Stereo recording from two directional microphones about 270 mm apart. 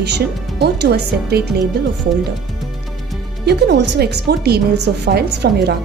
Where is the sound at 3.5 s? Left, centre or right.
Right.